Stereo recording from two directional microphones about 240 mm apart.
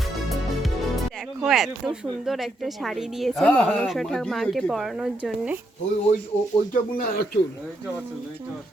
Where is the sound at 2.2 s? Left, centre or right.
Centre.